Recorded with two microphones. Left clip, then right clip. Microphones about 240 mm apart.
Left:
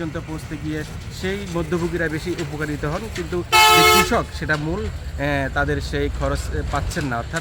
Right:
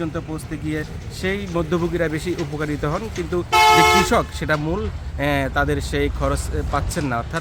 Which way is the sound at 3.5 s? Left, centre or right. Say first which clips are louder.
Left 1 dB; left.